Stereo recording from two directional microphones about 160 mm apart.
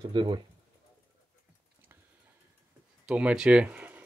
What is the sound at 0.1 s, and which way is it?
Speech, 30° right (ahead or behind).